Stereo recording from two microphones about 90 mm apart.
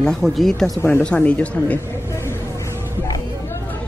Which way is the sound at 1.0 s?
15° left (ahead or behind).